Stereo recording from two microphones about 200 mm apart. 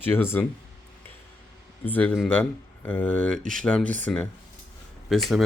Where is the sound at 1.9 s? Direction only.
10° left (ahead or behind).